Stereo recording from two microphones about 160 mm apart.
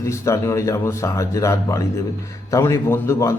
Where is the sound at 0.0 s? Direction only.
20° left (ahead or behind).